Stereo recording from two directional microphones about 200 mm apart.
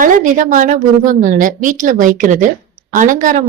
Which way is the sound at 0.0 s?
40° right (ahead or behind).